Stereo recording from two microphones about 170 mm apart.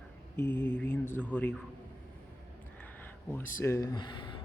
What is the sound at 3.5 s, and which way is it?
Speech, 15° left (ahead or behind).